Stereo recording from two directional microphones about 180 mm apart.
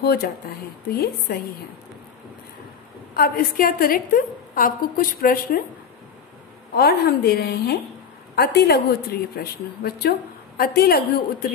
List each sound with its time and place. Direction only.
0.0 s a woman's voice: 60° left (ahead or behind)
3.2 s a woman's voice: 55° left (ahead or behind)
6.7 s a woman's voice: 60° left (ahead or behind)